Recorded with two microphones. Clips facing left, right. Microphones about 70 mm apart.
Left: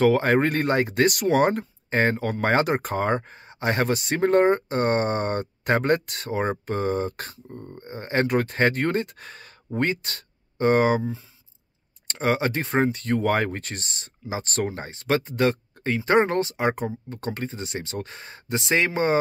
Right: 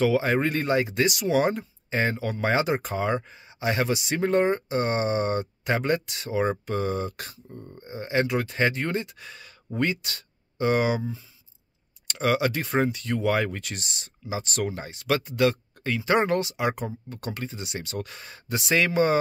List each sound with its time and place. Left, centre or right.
0.0 s speech: left